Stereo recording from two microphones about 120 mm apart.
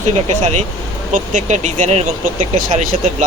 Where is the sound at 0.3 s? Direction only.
80° right.